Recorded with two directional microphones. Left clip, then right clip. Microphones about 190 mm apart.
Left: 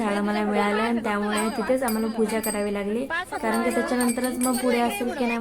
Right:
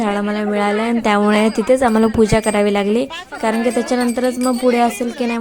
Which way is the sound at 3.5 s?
40° right (ahead or behind).